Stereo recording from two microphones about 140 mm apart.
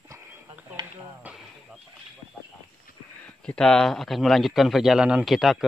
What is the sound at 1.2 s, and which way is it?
Speech, 10° right (ahead or behind).